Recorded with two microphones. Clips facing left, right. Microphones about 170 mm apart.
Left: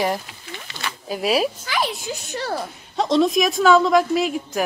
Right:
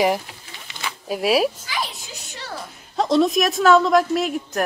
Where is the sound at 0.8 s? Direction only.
Centre (ahead or behind).